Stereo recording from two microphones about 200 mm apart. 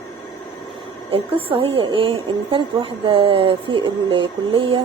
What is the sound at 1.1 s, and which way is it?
A woman's voice, 30° right (ahead or behind).